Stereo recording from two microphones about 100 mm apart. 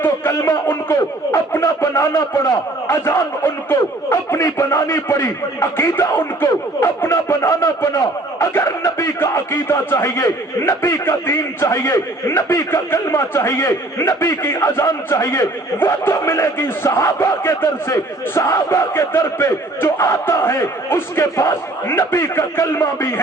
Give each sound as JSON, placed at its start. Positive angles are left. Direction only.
{"t": 0.0, "sound": "a man's voice", "side_deg": 25}